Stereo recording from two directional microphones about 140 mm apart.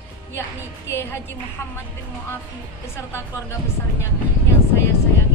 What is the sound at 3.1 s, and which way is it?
Speech, 20° left (ahead or behind).